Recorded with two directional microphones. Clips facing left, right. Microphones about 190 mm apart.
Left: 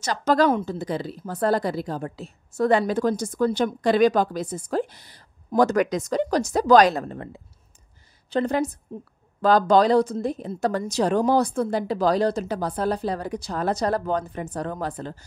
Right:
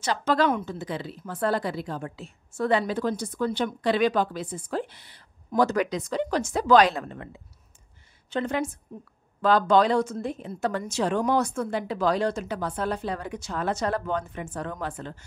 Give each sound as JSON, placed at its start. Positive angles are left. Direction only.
{"t": 0.0, "sound": "a woman's voice", "side_deg": 40}